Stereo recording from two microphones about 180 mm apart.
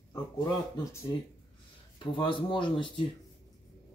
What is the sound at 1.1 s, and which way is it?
Speech, 20° left (ahead or behind).